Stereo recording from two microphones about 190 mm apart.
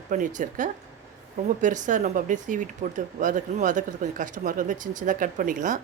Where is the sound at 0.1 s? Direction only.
45° right (ahead or behind).